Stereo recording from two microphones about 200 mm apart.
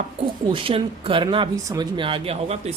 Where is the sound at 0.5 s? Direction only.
25° right (ahead or behind).